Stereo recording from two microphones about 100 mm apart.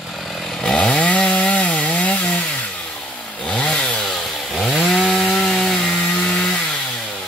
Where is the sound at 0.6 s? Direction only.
10° left (ahead or behind).